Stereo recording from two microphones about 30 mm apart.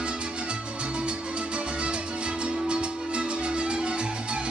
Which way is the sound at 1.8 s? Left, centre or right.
Right.